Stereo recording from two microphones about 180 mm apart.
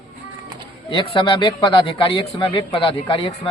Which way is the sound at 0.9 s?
30° left (ahead or behind).